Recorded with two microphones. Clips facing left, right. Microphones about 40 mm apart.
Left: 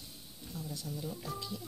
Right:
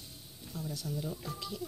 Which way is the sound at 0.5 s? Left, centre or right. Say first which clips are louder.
Right 3 dB; right.